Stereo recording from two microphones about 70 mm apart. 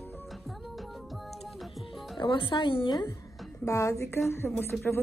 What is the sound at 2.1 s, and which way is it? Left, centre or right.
Speech, left.